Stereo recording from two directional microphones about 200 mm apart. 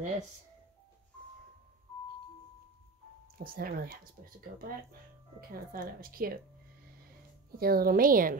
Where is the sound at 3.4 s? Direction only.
45° right (ahead or behind).